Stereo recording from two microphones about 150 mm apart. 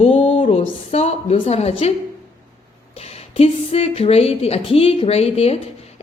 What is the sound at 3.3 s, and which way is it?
A woman's voice, 40° left (ahead or behind).